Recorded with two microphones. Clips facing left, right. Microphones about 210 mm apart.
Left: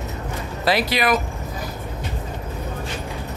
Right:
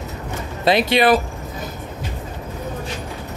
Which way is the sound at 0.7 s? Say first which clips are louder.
Right 5 dB; 25° right (ahead or behind).